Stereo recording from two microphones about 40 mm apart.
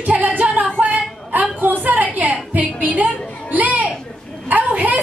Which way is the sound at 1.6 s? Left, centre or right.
Right.